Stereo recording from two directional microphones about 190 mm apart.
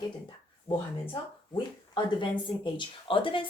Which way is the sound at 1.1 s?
25° left (ahead or behind).